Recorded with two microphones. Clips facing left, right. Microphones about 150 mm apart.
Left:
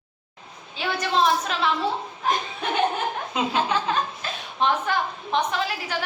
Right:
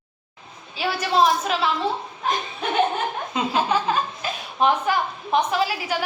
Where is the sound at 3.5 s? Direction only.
10° right (ahead or behind).